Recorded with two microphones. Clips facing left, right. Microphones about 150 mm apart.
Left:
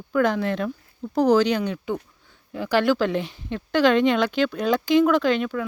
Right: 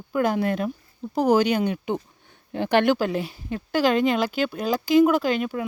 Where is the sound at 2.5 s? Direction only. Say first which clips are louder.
Right 2 dB; 60° right (ahead or behind).